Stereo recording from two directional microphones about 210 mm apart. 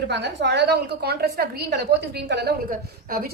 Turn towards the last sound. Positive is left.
turn(degrees=-45)  # may be behind; listen again after turning